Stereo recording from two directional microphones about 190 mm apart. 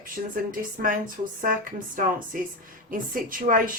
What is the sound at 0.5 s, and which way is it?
Speech, 45° right (ahead or behind).